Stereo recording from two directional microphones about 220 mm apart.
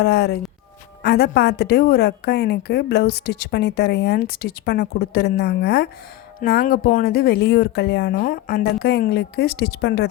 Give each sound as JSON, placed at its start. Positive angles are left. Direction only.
{"t": 0.0, "sound": "a woman's voice", "side_deg": 50}